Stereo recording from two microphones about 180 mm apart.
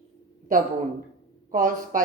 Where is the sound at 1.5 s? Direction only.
45° right (ahead or behind).